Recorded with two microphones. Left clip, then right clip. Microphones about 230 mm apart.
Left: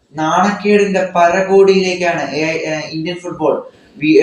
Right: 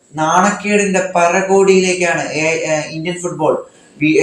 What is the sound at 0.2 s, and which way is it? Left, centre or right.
Speech, right.